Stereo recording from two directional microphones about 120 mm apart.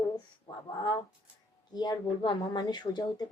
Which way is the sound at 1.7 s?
35° left (ahead or behind).